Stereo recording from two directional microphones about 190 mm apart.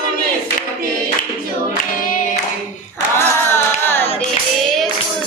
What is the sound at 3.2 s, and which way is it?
Carnatic music, 10° left (ahead or behind).